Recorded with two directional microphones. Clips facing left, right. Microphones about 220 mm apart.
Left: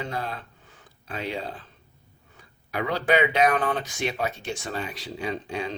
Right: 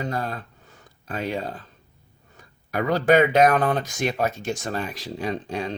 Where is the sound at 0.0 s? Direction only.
45° right (ahead or behind).